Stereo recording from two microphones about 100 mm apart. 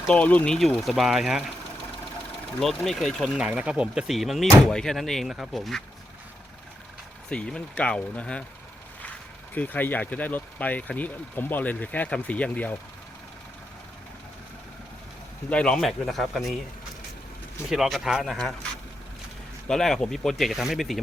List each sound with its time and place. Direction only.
0.1 s speech: 15° left (ahead or behind); by 1.5 s 5° right (ahead or behind)
2.6 s speech: centre (ahead or behind)
3.3 s speech: 10° right (ahead or behind)
7.3 s speech: 10° left (ahead or behind)
9.6 s speech: 15° left (ahead or behind)
15.4 s speech: 10° left (ahead or behind)
17.7 s speech: centre (ahead or behind)
19.6 s speech: 5° left (ahead or behind)